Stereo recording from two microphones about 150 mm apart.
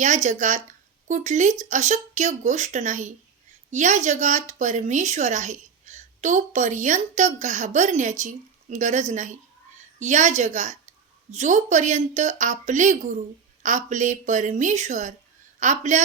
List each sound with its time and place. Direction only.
0.0 s a woman's voice: 55° right (ahead or behind)